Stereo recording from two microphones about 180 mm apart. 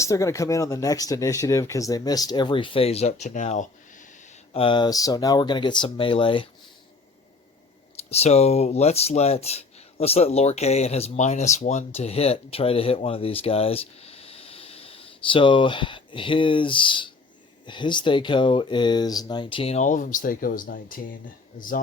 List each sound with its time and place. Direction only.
0.0 s speech: 15° left (ahead or behind); by 4.1 s 45° left (ahead or behind)
4.5 s speech: 30° left (ahead or behind)
7.9 s speech: 35° left (ahead or behind)